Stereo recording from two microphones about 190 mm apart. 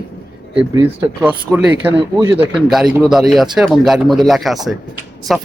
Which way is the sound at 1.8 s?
15° right (ahead or behind).